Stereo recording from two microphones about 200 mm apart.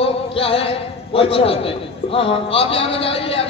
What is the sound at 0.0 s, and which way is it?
A man's voice, 25° left (ahead or behind).